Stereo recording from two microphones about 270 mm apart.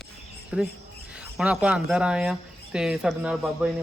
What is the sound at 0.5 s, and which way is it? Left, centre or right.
Speech, centre.